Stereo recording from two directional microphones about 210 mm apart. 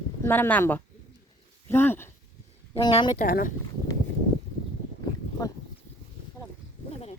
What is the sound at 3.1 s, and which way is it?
Speech, 40° left (ahead or behind).